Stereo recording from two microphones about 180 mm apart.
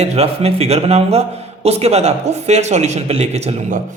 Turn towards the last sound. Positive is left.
turn(degrees=-35)  # may be behind; listen again after turning